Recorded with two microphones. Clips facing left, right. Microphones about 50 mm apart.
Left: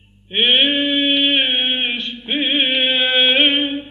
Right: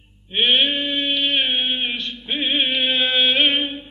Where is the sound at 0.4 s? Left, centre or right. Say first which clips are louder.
Left 3 dB; left.